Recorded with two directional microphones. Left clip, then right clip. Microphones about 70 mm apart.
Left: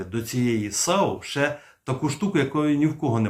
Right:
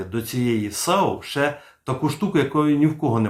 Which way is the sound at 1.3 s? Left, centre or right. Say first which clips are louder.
Right 2 dB; centre.